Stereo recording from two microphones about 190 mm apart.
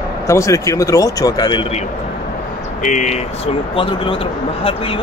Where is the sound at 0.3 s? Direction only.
15° left (ahead or behind).